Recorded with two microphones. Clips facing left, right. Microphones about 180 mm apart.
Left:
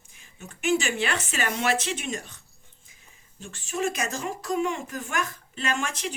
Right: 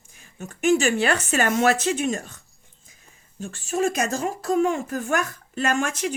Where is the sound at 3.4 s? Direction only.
40° right (ahead or behind).